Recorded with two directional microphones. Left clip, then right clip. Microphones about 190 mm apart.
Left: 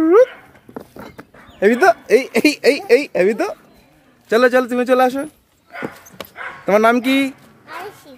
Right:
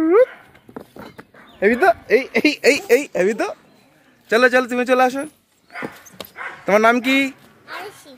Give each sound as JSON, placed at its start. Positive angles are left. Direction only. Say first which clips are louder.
{"t": 0.0, "sound": "dog", "louder": "left 3 dB", "side_deg": 10}
{"t": 0.7, "sound": "speech", "louder": "left 2 dB", "side_deg": 0}
{"t": 5.7, "sound": "dog", "louder": "left 2 dB", "side_deg": 60}
{"t": 6.6, "sound": "a sound", "louder": "left 1 dB", "side_deg": 0}